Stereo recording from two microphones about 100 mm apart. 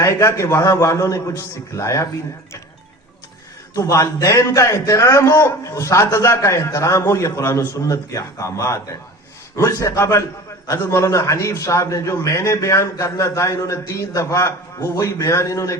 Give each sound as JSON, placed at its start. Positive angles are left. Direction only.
{"t": 0.0, "sound": "a man's voice", "side_deg": 30}
{"t": 3.8, "sound": "a man's voice", "side_deg": 30}